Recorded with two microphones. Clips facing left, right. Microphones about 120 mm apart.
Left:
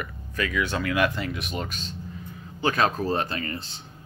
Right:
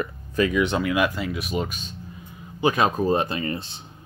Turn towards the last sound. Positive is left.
turn(degrees=-20)  # may be behind; listen again after turning